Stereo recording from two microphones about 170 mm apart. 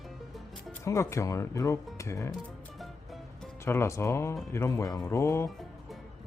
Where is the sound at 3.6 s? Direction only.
15° left (ahead or behind).